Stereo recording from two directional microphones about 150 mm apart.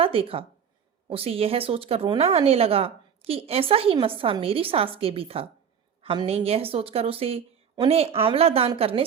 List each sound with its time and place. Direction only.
0.0 s a woman's voice: 40° right (ahead or behind)